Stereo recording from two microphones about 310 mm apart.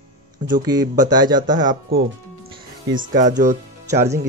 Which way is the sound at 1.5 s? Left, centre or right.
Right.